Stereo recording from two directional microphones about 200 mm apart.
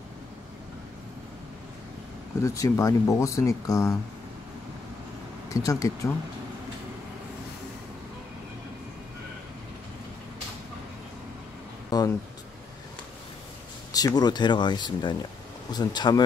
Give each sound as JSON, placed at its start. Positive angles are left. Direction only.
{"t": 2.4, "sound": "speech", "side_deg": 15}
{"t": 5.5, "sound": "speech", "side_deg": 15}
{"t": 11.9, "sound": "a sound", "side_deg": 20}
{"t": 13.9, "sound": "speech", "side_deg": 20}